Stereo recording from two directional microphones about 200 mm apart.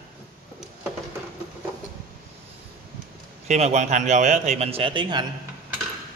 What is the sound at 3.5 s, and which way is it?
A man's voice, 35° right (ahead or behind).